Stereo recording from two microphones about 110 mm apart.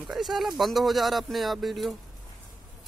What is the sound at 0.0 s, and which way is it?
Speech, centre (ahead or behind).